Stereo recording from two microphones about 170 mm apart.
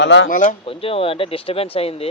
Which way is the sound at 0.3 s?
50° left (ahead or behind).